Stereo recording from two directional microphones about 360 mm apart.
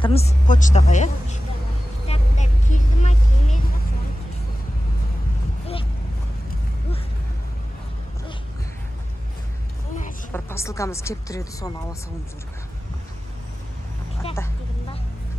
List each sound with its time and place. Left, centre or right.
0.0 s a woman's voice: centre
2.0 s vehicle: centre
10.3 s speech: centre
14.2 s a sound: centre